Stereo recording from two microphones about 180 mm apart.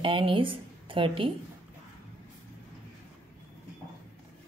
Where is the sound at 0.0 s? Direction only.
30° right (ahead or behind).